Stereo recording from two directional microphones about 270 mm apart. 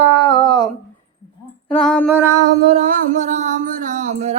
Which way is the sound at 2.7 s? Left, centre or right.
Right.